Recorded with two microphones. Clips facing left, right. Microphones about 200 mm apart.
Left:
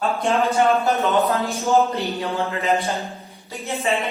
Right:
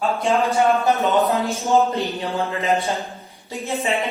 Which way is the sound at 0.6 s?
Centre (ahead or behind).